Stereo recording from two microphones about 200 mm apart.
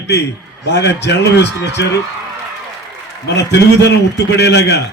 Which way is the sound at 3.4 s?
60° left (ahead or behind).